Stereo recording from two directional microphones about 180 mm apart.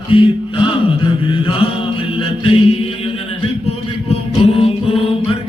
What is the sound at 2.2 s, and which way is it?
Mantra, 30° left (ahead or behind).